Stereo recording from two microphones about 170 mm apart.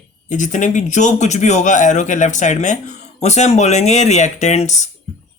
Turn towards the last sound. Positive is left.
turn(degrees=40)  # may be behind; listen again after turning